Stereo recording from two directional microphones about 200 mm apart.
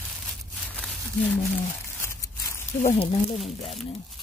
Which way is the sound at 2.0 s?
15° left (ahead or behind).